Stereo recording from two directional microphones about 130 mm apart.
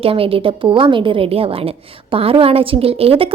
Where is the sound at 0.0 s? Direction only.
45° right (ahead or behind).